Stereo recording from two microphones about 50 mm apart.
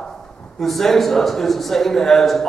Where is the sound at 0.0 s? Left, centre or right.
Centre.